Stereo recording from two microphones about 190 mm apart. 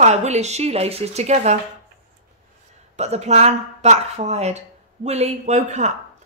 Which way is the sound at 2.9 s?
35° right (ahead or behind).